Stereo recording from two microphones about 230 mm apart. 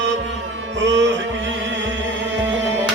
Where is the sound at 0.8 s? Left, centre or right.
Right.